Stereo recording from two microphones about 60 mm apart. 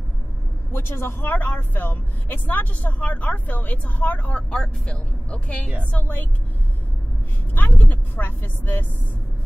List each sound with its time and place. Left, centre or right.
0.7 s speech: left; by 5.7 s centre
5.9 s a woman's voice: left
7.5 s a woman's voice: left